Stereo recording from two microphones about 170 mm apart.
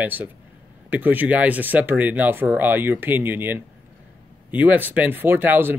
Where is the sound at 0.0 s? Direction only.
10° right (ahead or behind).